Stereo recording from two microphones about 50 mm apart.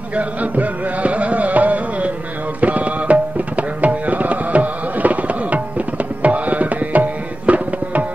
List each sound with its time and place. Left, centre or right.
0.1 s music: right
2.6 s tabla: right